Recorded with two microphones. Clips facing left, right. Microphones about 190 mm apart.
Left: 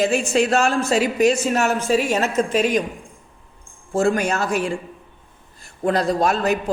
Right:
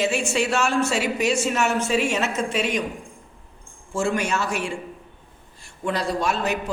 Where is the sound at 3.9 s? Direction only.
40° left (ahead or behind).